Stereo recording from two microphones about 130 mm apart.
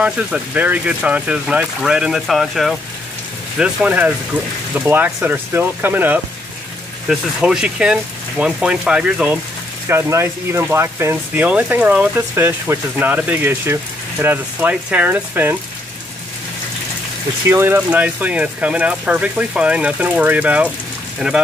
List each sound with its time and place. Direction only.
0.0 s speech: 10° right (ahead or behind)
9.8 s speech: 20° right (ahead or behind)
17.5 s speech: 15° right (ahead or behind)